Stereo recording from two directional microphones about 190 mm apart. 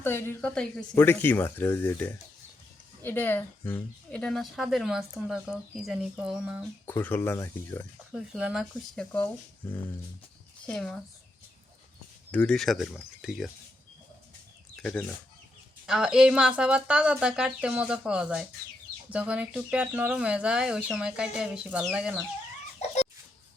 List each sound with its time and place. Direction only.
0.0 s speech: 10° left (ahead or behind); by 6.7 s 5° right (ahead or behind)
6.8 s speech: 10° left (ahead or behind)
8.1 s speech: 5° right (ahead or behind)
12.3 s speech: 5° left (ahead or behind)
14.8 s speech: 5° left (ahead or behind)